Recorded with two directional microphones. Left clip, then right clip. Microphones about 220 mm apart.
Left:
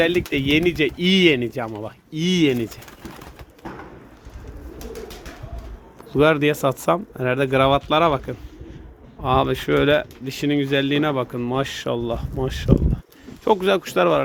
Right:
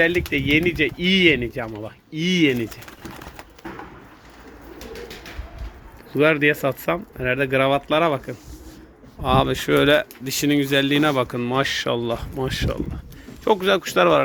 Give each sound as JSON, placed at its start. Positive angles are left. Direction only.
{"t": 0.3, "sound": "speech", "side_deg": 20}
{"t": 6.1, "sound": "speech", "side_deg": 10}